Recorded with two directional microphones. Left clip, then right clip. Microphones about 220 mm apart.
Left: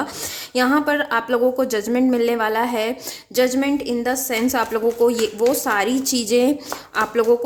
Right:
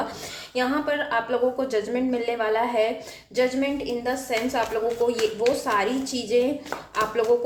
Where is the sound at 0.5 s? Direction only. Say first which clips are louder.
Left 6 dB; 50° left (ahead or behind).